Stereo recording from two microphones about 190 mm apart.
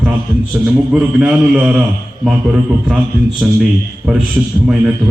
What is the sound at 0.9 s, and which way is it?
Speech, 5° right (ahead or behind).